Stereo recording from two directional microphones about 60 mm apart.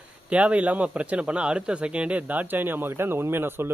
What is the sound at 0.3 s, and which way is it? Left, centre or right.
Speech, right.